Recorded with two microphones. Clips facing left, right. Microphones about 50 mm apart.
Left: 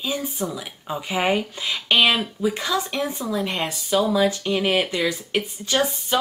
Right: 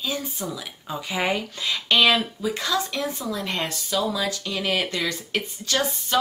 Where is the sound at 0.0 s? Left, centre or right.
Left.